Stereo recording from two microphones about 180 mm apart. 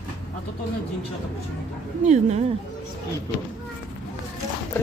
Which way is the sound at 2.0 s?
40° right (ahead or behind).